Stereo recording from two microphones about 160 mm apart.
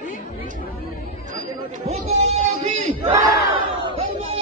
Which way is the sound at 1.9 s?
40° right (ahead or behind).